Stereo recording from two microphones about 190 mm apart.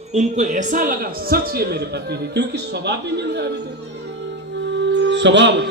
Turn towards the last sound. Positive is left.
turn(degrees=-70)  # may be behind; listen again after turning